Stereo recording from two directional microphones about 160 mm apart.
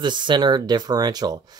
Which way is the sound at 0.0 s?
30° right (ahead or behind).